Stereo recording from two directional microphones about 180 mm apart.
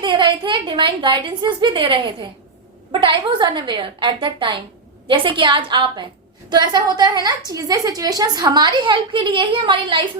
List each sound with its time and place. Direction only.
0.0 s a woman's voice: 25° right (ahead or behind)